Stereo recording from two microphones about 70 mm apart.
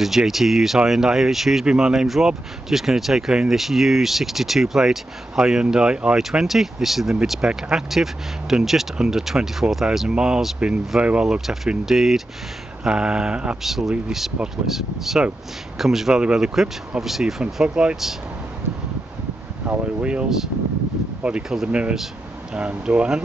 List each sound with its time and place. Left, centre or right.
0.0 s speech: centre
13.6 s speech: centre
20.0 s speech: centre